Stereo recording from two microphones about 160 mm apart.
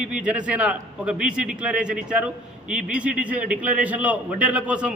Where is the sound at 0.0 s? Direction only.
5° right (ahead or behind).